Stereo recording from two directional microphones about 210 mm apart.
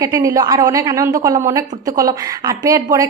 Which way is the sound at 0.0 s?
15° right (ahead or behind).